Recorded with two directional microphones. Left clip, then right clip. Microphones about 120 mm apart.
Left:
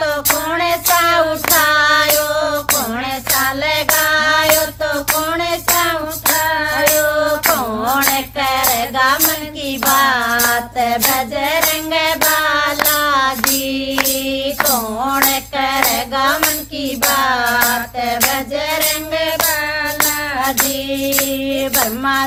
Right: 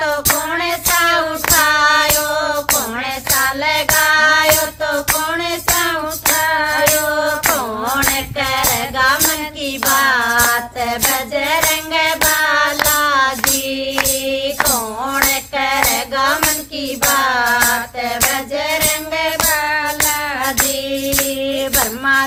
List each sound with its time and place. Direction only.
0.5 s child singing: 20° left (ahead or behind)
3.6 s music: 20° left (ahead or behind)
6.5 s music: 35° right (ahead or behind)
7.4 s music: 15° left (ahead or behind)
9.9 s music: 20° left (ahead or behind)
15.5 s music: 20° left (ahead or behind)
19.5 s music: 45° right (ahead or behind)
21.5 s music: 25° left (ahead or behind)